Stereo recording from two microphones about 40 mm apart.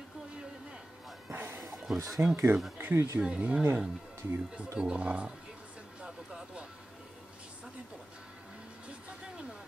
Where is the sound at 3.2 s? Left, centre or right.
Right.